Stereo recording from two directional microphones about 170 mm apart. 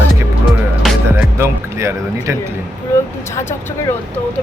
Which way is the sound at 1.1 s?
15° right (ahead or behind).